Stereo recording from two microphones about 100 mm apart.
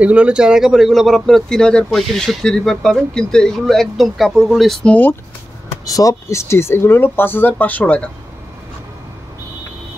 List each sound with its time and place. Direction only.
0.0 s speech: 10° right (ahead or behind); by 4.9 s 5° left (ahead or behind)
5.9 s speech: 35° left (ahead or behind); by 8.1 s 10° left (ahead or behind)